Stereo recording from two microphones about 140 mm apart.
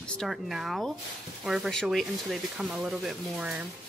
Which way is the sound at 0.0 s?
5° left (ahead or behind).